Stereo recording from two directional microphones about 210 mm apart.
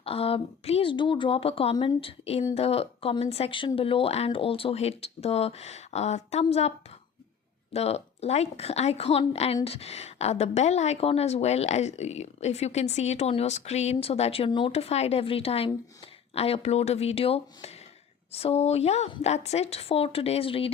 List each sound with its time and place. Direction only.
0.0 s a woman's voice: 25° left (ahead or behind)